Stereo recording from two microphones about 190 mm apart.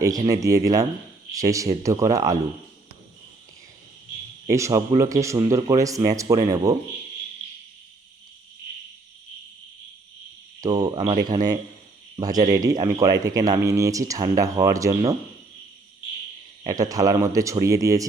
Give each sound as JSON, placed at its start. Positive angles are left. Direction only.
{"t": 0.3, "sound": "speech", "side_deg": -15}
{"t": 4.4, "sound": "speech", "side_deg": -15}
{"t": 10.6, "sound": "speech", "side_deg": -20}
{"t": 16.6, "sound": "speech", "side_deg": -20}